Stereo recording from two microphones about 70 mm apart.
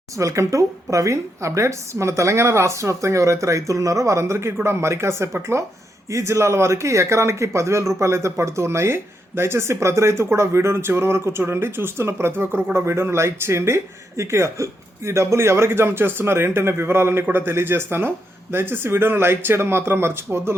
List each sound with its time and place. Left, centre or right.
0.2 s a woman's voice: right